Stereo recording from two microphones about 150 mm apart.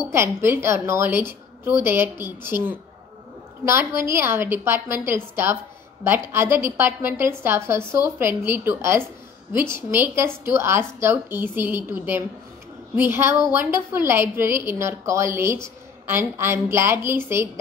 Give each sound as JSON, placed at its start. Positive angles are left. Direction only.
{"t": 0.1, "sound": "a woman's voice", "side_deg": -15}